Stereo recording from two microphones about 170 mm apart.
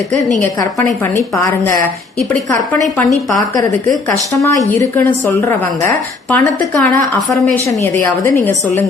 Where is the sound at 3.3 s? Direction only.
20° left (ahead or behind).